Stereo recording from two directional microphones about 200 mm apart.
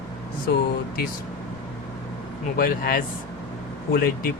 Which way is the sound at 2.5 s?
45° left (ahead or behind).